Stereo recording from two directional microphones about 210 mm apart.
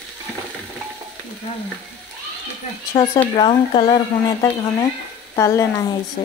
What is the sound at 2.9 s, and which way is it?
Speech, 15° left (ahead or behind).